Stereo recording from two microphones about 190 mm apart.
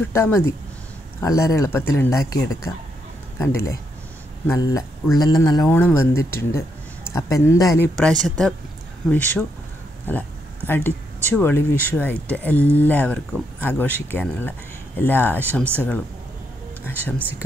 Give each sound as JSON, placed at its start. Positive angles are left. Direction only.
{"t": 0.1, "sound": "speech", "side_deg": 10}
{"t": 8.0, "sound": "speech", "side_deg": 5}
{"t": 10.7, "sound": "speech", "side_deg": 10}
{"t": 16.9, "sound": "speech", "side_deg": -10}